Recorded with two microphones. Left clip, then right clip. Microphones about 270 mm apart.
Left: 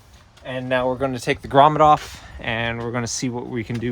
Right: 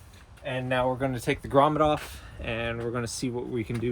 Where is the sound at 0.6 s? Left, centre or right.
Left.